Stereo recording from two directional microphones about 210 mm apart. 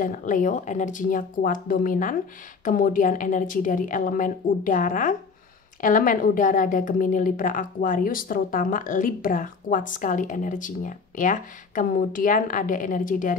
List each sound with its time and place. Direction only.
0.0 s a woman's voice: 40° left (ahead or behind)